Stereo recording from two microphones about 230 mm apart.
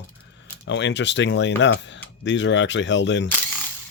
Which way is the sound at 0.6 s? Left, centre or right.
Left.